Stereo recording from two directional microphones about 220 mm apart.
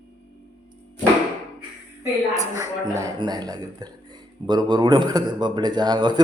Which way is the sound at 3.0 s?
20° right (ahead or behind).